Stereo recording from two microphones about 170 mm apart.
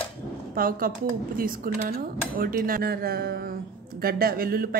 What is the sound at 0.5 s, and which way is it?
Speech, 60° right (ahead or behind).